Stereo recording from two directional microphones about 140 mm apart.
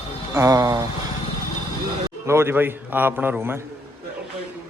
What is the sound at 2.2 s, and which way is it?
A man's voice, 20° right (ahead or behind).